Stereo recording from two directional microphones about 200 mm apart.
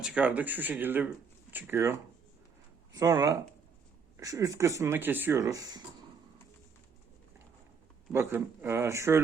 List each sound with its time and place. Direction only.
0.0 s speech: 5° right (ahead or behind)
8.1 s speech: 10° right (ahead or behind)